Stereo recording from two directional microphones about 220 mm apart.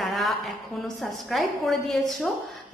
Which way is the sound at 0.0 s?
Centre (ahead or behind).